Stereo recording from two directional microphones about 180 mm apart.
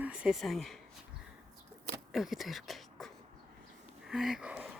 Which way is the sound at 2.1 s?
Centre (ahead or behind).